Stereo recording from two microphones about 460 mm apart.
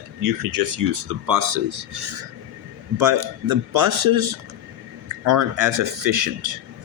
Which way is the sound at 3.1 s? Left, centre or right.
Right.